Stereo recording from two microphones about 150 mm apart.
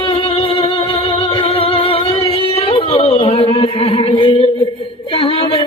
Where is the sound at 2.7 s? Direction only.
35° left (ahead or behind).